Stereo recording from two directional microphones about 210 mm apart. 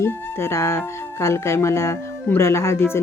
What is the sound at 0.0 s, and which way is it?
Speech, 10° left (ahead or behind).